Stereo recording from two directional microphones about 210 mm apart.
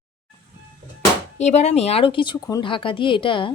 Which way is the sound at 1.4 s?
30° left (ahead or behind).